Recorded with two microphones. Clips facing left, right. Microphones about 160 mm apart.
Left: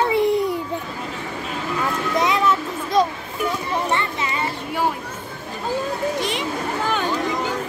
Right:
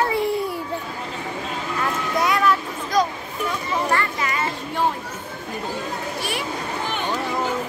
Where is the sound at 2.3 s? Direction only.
25° left (ahead or behind).